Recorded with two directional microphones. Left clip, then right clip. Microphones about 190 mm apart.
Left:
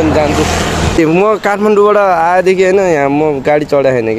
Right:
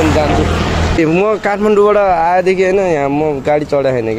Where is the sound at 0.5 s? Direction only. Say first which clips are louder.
Left 2 dB; 50° left (ahead or behind).